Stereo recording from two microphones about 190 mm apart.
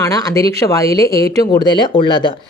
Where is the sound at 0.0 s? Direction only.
15° left (ahead or behind).